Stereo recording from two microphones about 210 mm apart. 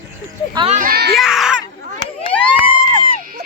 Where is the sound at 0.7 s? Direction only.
45° right (ahead or behind).